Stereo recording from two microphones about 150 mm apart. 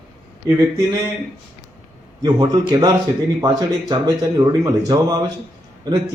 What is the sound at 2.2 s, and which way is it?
Speech, 30° right (ahead or behind).